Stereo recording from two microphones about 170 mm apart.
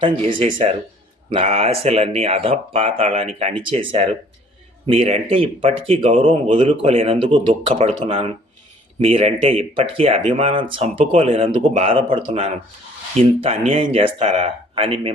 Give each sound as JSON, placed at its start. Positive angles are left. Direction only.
{"t": 0.0, "sound": "speech", "side_deg": -30}